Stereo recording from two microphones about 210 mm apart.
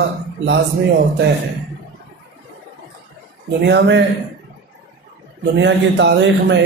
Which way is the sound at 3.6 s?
55° right (ahead or behind).